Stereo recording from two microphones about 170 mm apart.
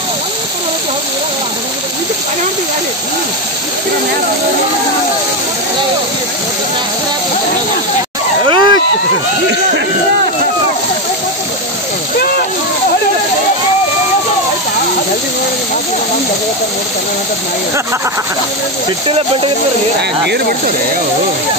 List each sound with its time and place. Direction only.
8.5 s a sound: 25° right (ahead or behind)
19.0 s speech: 35° right (ahead or behind)
20.0 s speech: 75° right (ahead or behind)